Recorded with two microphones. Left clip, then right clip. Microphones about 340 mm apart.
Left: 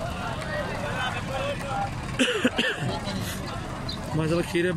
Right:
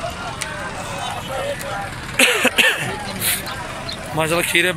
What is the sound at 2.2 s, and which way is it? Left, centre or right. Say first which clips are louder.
Cough: right 10 dB; centre.